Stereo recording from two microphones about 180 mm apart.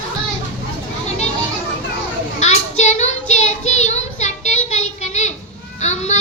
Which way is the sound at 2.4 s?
40° left (ahead or behind).